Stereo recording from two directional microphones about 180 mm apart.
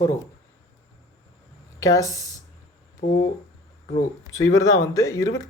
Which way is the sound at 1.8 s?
20° left (ahead or behind).